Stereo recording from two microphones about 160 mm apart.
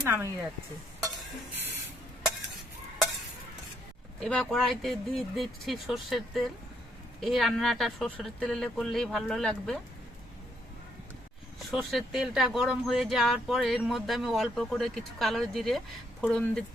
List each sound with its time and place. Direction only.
0.1 s speech: 15° right (ahead or behind)
4.2 s speech: 5° left (ahead or behind)
11.7 s speech: centre (ahead or behind)